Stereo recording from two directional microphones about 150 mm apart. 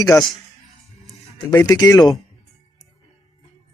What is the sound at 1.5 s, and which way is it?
Speech, 20° left (ahead or behind).